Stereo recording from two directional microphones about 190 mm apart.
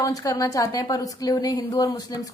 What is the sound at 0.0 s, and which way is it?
A woman's voice, 20° left (ahead or behind).